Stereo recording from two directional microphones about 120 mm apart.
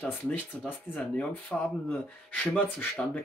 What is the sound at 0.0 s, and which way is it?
Speech, 15° left (ahead or behind).